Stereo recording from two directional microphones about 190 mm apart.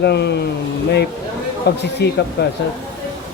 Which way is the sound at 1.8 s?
60° left (ahead or behind).